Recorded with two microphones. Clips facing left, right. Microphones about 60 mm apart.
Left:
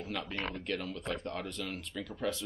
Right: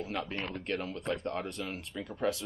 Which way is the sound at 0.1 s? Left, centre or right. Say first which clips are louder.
Right 1 dB; right.